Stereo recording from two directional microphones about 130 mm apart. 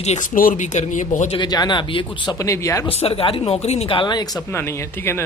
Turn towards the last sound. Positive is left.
turn(degrees=35)  # may be behind; listen again after turning